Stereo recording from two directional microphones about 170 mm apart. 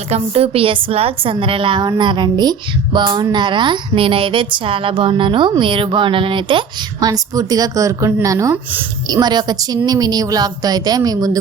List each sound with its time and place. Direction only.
0.1 s a woman's voice: 35° right (ahead or behind)